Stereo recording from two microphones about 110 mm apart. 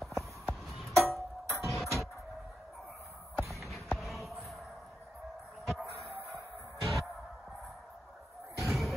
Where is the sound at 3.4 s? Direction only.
Centre (ahead or behind).